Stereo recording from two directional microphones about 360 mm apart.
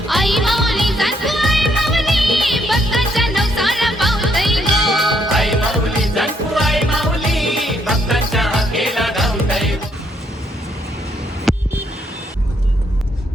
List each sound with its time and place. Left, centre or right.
0.1 s music: centre
11.5 s vehicle: centre